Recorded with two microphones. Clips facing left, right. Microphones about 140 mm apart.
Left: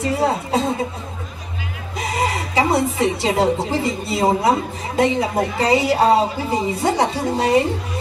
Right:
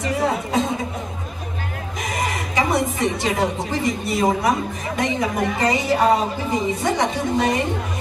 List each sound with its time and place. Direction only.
0.0 s chuckle: 30° left (ahead or behind)
2.0 s a woman's voice: 30° left (ahead or behind)